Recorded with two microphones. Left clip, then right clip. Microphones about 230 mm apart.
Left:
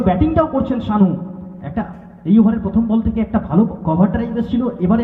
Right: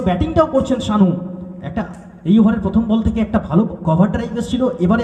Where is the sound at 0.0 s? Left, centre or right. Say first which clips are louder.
Even; right.